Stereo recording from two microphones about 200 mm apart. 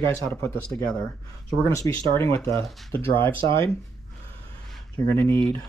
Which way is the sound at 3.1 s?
10° left (ahead or behind).